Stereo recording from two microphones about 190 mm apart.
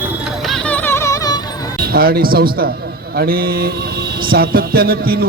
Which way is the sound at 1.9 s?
55° right (ahead or behind).